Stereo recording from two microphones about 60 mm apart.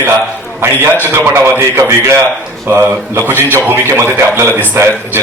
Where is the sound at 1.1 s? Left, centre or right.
Right.